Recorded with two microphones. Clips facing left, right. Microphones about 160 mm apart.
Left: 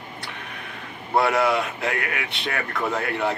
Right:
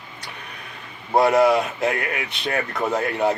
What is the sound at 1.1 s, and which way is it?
Speech, 40° right (ahead or behind).